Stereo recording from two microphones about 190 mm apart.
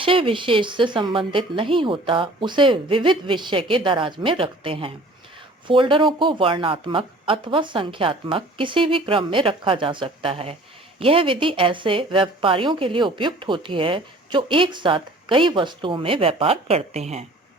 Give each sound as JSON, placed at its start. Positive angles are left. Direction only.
{"t": 0.0, "sound": "speech", "side_deg": -30}